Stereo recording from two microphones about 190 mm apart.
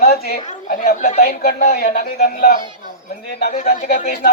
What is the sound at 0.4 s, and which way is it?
Speech, 45° left (ahead or behind).